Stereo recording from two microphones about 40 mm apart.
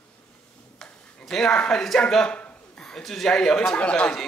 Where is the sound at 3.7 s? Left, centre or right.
Left.